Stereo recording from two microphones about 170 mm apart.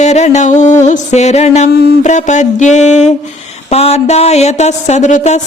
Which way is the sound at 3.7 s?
40° left (ahead or behind).